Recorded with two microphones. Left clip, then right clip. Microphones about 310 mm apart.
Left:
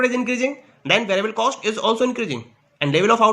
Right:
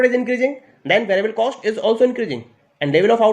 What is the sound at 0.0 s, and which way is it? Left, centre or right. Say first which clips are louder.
A man's voice: right 4 dB; centre.